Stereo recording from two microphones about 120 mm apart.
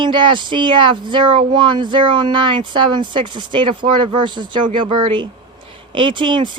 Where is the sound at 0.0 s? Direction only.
45° right (ahead or behind).